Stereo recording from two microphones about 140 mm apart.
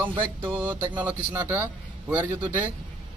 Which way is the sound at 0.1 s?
35° right (ahead or behind).